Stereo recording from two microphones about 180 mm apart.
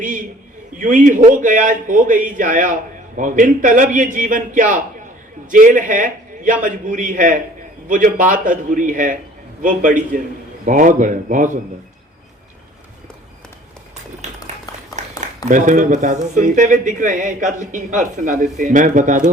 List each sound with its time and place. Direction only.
0.0 s a man's voice: 45° right (ahead or behind)
15.0 s a sound: 40° right (ahead or behind)
15.4 s a man's voice: 45° right (ahead or behind)